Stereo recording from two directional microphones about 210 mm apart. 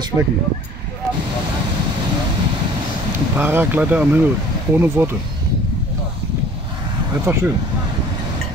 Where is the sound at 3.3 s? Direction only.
10° right (ahead or behind).